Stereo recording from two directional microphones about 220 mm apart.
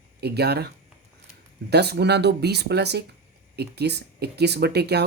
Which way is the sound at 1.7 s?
50° right (ahead or behind).